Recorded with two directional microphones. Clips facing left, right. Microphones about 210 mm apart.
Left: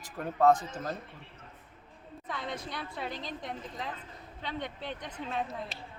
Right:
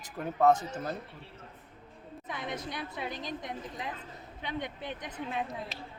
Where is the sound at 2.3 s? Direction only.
20° right (ahead or behind).